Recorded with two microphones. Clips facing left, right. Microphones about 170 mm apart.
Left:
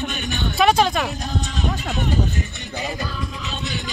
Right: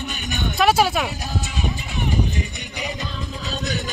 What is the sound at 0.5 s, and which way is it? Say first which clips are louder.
Speech: left 1 dB; 5° right (ahead or behind).